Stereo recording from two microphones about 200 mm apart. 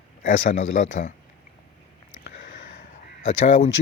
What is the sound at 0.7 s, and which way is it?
Speech, 45° left (ahead or behind).